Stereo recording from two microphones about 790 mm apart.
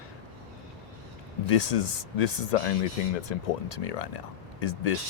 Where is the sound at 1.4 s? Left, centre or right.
Left.